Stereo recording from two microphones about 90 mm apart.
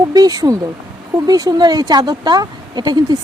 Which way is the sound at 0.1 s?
45° right (ahead or behind).